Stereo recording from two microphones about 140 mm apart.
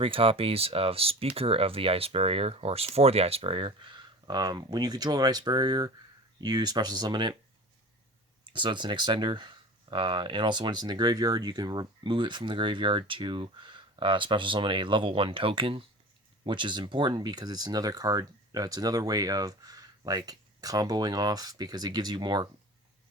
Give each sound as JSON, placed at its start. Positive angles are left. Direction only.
{"t": 0.0, "sound": "speech", "side_deg": -40}
{"t": 8.5, "sound": "speech", "side_deg": -35}